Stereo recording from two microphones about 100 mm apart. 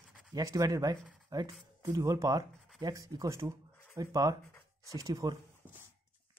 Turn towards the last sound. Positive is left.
turn(degrees=-35)  # may be behind; listen again after turning